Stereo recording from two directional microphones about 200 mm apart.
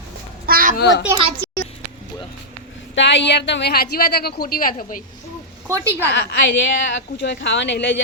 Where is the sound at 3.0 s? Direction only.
65° left (ahead or behind); by 5.0 s 45° left (ahead or behind).